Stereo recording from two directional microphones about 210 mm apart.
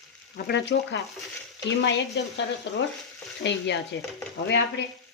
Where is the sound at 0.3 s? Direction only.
50° left (ahead or behind).